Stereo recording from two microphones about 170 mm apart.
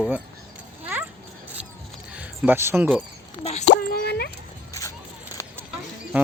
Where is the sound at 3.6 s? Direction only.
80° left.